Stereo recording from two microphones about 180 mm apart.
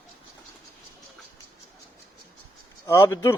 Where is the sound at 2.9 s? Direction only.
15° left (ahead or behind).